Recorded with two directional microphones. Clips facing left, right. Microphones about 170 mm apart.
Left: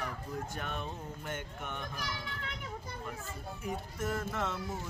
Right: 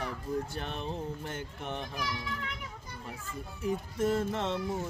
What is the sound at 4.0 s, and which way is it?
Mantra, 30° right (ahead or behind).